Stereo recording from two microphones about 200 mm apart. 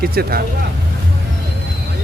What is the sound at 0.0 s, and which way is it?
Speech, 50° right (ahead or behind).